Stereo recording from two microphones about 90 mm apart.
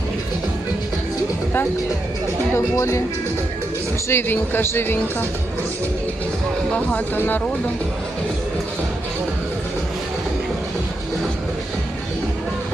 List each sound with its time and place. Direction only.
2.7 s music: 35° left (ahead or behind)
4.1 s speech: 25° left (ahead or behind)
6.9 s speech: 20° left (ahead or behind)